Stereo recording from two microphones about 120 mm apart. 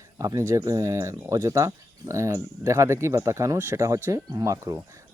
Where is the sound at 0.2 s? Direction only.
25° right (ahead or behind).